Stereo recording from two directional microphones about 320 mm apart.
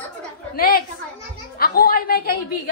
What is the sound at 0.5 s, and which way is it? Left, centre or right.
Speech, left.